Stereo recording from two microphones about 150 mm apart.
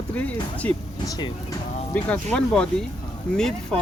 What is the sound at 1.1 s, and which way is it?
Speech, 30° left (ahead or behind).